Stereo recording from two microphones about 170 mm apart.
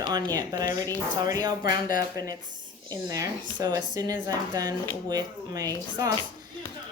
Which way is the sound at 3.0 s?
20° right (ahead or behind).